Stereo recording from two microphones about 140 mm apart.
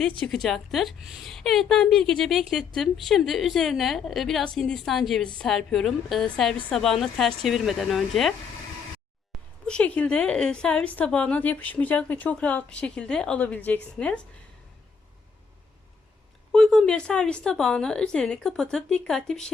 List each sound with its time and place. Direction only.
0.2 s a woman's voice: centre (ahead or behind)
9.6 s a woman's voice: 10° left (ahead or behind)
16.5 s a woman's voice: 5° left (ahead or behind)